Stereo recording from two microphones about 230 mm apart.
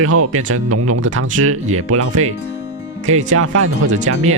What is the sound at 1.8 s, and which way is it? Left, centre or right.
Speech, right.